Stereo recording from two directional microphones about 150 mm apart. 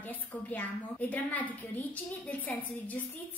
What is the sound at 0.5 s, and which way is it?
A woman's voice, 10° left (ahead or behind).